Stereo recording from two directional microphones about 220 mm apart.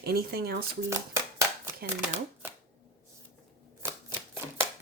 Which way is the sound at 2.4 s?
10° right (ahead or behind).